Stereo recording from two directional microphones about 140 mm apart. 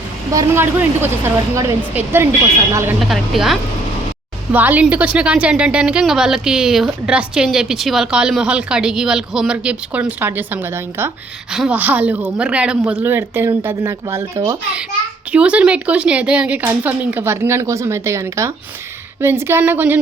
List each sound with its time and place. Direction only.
0.3 s a woman's voice: 15° right (ahead or behind)
3.0 s a woman's voice: centre (ahead or behind)
4.5 s a woman's voice: 10° right (ahead or behind)
15.3 s a woman's voice: 10° right (ahead or behind)